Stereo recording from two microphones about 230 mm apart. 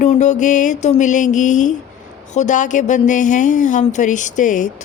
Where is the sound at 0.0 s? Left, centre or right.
Left.